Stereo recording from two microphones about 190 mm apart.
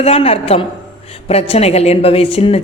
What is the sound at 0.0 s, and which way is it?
A man's voice, 30° left (ahead or behind).